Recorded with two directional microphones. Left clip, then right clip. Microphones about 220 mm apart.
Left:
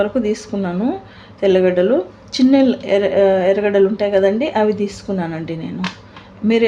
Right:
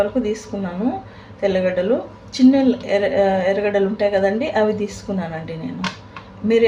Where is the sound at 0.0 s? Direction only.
45° left (ahead or behind).